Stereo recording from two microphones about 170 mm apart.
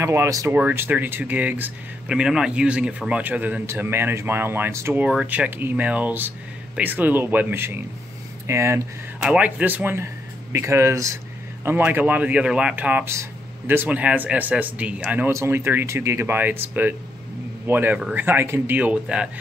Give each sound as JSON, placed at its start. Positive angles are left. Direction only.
{"t": 0.0, "sound": "speech", "side_deg": -15}